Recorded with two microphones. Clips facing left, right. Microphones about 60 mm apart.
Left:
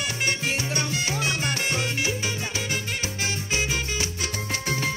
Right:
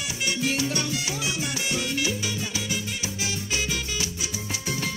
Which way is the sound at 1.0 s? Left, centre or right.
Left.